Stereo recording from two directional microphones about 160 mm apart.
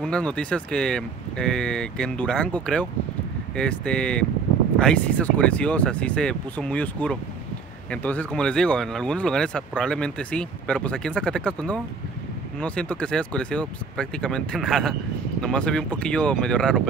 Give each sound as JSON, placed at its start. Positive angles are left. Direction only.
{"t": 0.0, "sound": "speech", "side_deg": 5}